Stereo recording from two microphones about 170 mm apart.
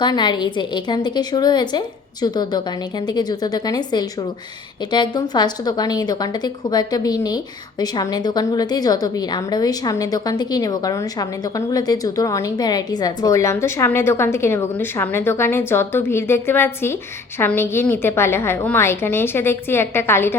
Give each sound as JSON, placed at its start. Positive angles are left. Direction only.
{"t": 0.0, "sound": "a woman's voice", "side_deg": 25}